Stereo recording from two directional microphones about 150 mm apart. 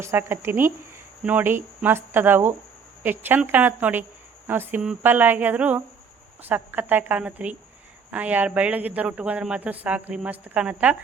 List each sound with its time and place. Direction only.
0.0 s a man's voice: 15° right (ahead or behind)